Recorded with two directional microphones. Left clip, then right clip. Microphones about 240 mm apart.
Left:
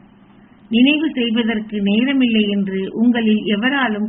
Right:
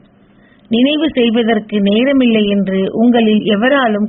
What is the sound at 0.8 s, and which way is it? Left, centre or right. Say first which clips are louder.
A woman's voice: right 4 dB; right.